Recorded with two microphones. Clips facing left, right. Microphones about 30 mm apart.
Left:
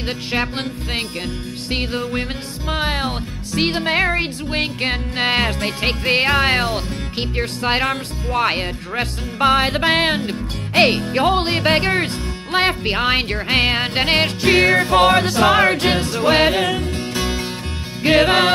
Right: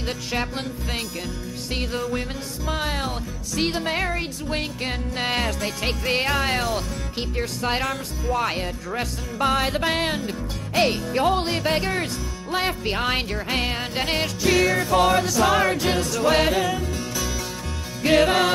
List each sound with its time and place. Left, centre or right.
0.0 s music: left
13.3 s music: left
16.6 s music: left